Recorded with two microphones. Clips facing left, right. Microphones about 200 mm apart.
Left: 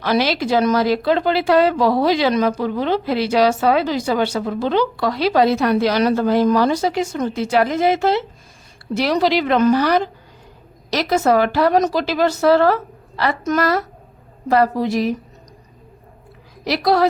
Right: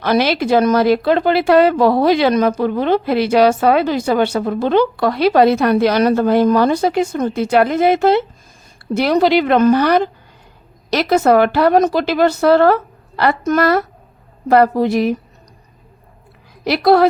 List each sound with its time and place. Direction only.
0.0 s speech: 55° right (ahead or behind)
16.6 s speech: 60° right (ahead or behind)